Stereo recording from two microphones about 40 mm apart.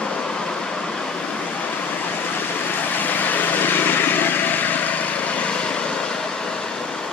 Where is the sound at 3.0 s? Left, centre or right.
Left.